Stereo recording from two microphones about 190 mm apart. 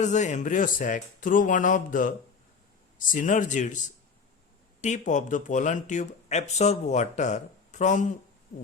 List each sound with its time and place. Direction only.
0.0 s speech: 40° left (ahead or behind)